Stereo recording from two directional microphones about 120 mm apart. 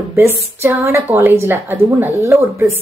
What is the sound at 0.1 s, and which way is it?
A woman's voice, 20° right (ahead or behind).